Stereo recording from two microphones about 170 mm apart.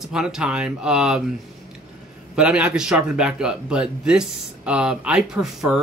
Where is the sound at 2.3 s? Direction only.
5° right (ahead or behind).